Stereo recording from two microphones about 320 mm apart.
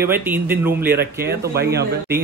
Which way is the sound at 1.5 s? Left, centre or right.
Right.